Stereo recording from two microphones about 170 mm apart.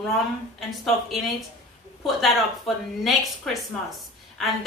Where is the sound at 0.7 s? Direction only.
Centre (ahead or behind).